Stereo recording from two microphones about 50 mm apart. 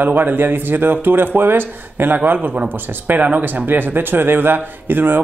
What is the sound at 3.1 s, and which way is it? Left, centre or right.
Speech, right.